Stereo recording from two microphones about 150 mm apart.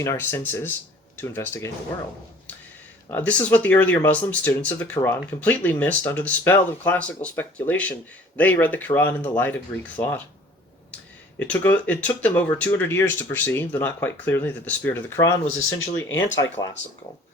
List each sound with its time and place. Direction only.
0.0 s speech: 15° left (ahead or behind)
3.1 s speech: 10° left (ahead or behind)
11.3 s speech: 10° left (ahead or behind)